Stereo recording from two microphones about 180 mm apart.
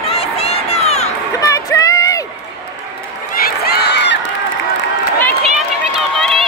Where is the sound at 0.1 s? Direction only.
35° left (ahead or behind).